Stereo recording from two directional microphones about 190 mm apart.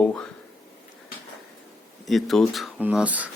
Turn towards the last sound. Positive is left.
turn(degrees=-10)  # may be behind; listen again after turning